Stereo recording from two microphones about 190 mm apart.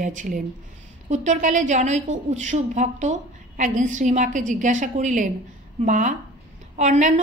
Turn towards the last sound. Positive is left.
turn(degrees=-40)  # may be behind; listen again after turning